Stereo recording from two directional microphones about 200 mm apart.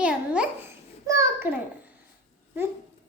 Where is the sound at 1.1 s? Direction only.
15° right (ahead or behind).